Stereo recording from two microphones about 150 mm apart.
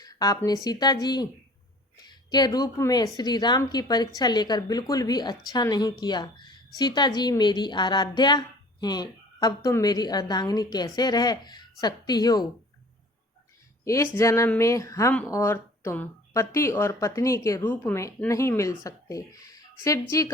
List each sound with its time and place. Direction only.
0.0 s speech: 25° left (ahead or behind)
13.8 s speech: 20° left (ahead or behind)